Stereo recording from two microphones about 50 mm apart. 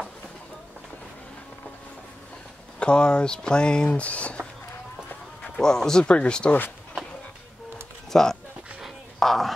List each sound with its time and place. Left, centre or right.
2.8 s speech: centre
5.6 s speech: centre
8.1 s a sound: centre
9.2 s speech: centre